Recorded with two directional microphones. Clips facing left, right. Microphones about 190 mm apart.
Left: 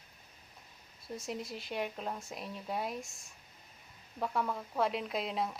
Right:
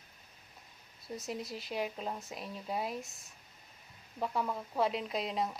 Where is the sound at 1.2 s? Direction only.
Centre (ahead or behind).